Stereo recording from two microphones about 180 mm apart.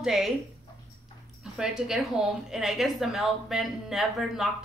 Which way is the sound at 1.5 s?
5° right (ahead or behind).